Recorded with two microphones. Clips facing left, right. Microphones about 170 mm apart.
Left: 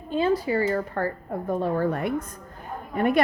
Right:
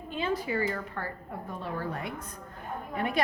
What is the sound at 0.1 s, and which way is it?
A woman's voice, 40° left (ahead or behind).